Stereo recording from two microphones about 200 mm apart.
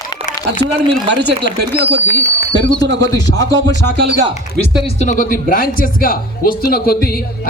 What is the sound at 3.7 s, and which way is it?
Speech, 60° right (ahead or behind).